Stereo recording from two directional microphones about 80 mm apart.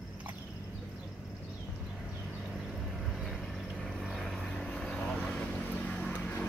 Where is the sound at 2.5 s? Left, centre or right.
Centre.